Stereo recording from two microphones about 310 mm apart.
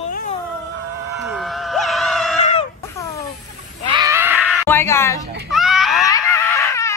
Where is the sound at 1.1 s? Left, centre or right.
Centre.